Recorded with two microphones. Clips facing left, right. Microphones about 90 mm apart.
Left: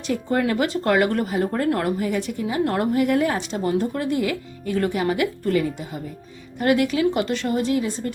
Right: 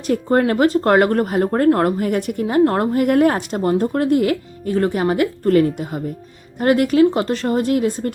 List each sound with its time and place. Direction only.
0.1 s speech: 45° right (ahead or behind)
4.7 s speech: 35° right (ahead or behind)